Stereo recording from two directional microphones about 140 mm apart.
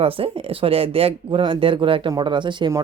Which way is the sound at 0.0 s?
40° right (ahead or behind).